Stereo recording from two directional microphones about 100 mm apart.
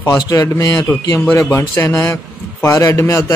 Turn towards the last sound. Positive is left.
turn(degrees=30)  # may be behind; listen again after turning